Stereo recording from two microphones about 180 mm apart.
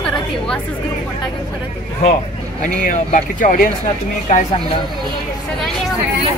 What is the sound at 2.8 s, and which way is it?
Speech, 50° left (ahead or behind).